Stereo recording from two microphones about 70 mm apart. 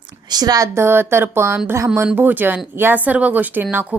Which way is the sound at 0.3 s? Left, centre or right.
Right.